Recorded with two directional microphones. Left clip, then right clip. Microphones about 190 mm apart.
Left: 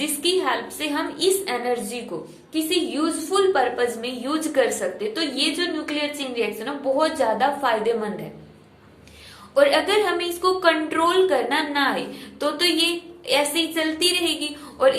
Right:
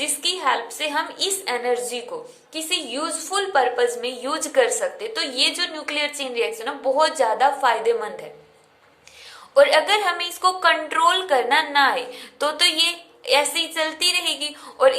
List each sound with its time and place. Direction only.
0.0 s a woman's voice: 20° right (ahead or behind)
9.6 s a woman's voice: 25° right (ahead or behind)